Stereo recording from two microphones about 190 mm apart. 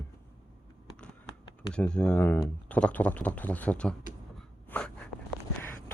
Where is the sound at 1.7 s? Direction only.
5° left (ahead or behind).